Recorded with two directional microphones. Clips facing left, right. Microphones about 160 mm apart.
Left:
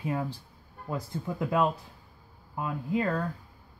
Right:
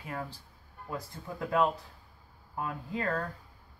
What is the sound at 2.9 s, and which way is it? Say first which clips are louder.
Speech: left 5 dB; 15° left (ahead or behind).